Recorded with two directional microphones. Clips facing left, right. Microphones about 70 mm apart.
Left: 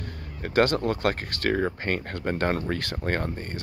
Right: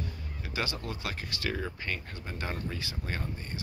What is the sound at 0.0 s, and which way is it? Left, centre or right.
Speech, left.